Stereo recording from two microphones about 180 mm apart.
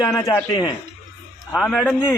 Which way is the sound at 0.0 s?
20° left (ahead or behind).